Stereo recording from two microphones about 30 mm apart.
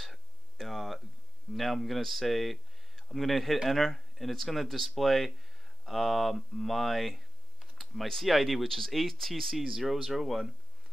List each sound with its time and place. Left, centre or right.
0.0 s a sound: centre
1.5 s speech: centre
7.7 s computer keyboard: centre
8.3 s speech: centre